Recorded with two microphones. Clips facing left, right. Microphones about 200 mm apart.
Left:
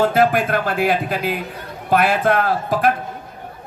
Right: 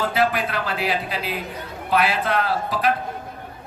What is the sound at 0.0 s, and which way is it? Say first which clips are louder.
A man's voice: left 6 dB; 50° left (ahead or behind).